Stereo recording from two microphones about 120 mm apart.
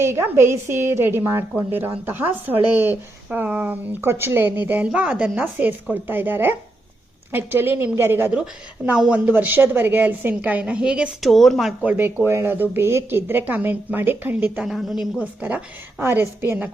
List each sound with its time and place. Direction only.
0.0 s a woman's voice: 20° right (ahead or behind); by 11.7 s centre (ahead or behind)
11.8 s a woman's voice: 15° right (ahead or behind)